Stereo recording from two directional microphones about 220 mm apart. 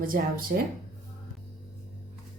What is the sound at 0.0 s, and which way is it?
Speech, 40° right (ahead or behind).